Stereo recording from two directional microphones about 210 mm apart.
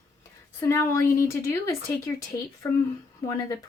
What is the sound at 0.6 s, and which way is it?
Speech, 10° left (ahead or behind).